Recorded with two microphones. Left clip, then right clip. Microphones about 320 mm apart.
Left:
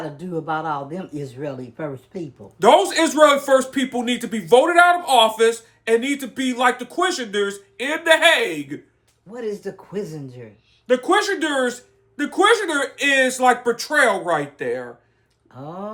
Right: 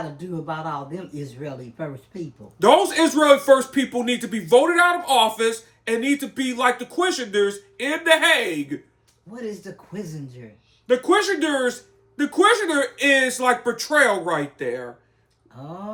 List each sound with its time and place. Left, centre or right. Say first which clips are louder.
0.4 s speech: left 5 dB; left
2.6 s speech: left 1 dB; centre
10.8 s speech: left 1 dB; centre